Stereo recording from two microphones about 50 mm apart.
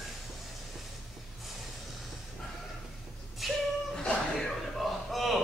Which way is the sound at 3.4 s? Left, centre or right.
Centre.